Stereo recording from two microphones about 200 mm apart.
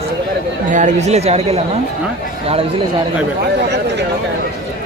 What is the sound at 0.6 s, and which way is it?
Speech, 40° right (ahead or behind).